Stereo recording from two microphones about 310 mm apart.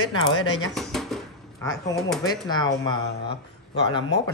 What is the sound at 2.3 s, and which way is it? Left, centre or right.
Speech, centre.